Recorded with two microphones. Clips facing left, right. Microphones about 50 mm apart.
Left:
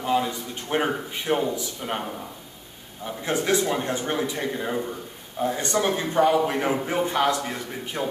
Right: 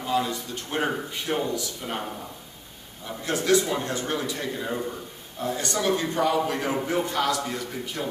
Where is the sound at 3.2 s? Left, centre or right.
Left.